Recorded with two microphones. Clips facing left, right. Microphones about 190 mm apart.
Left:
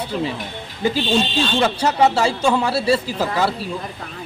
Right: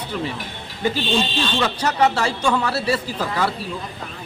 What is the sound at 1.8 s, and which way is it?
Speech, 25° left (ahead or behind).